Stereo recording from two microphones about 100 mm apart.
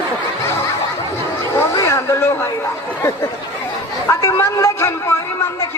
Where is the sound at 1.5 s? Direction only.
30° left (ahead or behind).